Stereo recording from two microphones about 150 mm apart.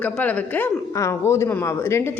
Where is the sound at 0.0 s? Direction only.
10° left (ahead or behind).